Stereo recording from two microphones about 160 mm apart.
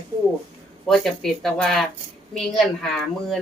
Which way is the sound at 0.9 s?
Centre (ahead or behind).